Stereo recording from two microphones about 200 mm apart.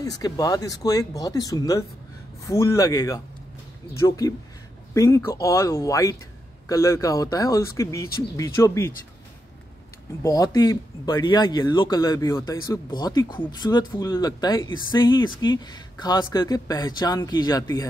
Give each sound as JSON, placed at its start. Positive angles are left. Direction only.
{"t": 0.0, "sound": "speech", "side_deg": 20}
{"t": 4.9, "sound": "speech", "side_deg": 15}
{"t": 10.2, "sound": "speech", "side_deg": 15}